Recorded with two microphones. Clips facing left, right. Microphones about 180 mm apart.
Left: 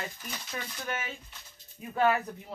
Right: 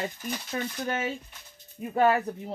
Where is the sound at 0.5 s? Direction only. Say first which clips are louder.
Right 6 dB; 40° right (ahead or behind).